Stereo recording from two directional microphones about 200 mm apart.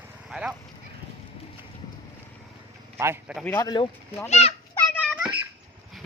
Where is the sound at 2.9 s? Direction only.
10° right (ahead or behind).